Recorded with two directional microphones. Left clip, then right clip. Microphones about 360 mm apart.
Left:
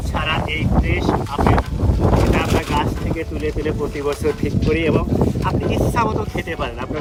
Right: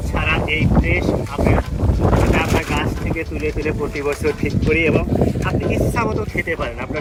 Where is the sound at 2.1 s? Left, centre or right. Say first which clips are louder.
Right 1 dB; centre.